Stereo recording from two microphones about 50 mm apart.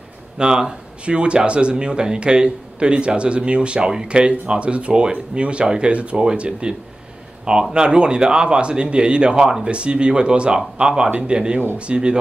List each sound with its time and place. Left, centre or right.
0.4 s speech: centre
7.7 s speech: centre